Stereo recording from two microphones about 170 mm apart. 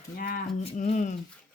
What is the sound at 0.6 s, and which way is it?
Speech, 45° left (ahead or behind).